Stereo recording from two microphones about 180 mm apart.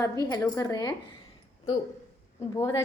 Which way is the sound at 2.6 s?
20° left (ahead or behind).